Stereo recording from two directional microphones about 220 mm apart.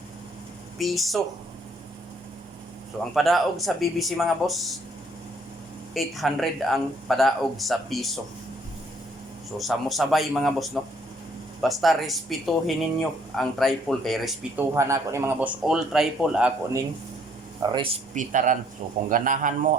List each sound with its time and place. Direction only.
0.8 s speech: centre (ahead or behind)
3.2 s speech: centre (ahead or behind)
5.9 s speech: centre (ahead or behind)
9.6 s speech: centre (ahead or behind)
17.6 s speech: 20° right (ahead or behind)
18.1 s a man's voice: 35° right (ahead or behind)